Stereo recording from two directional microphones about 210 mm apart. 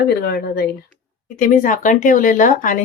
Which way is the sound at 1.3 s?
40° left (ahead or behind).